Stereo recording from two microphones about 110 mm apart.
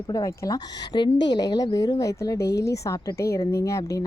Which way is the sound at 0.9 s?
45° left (ahead or behind).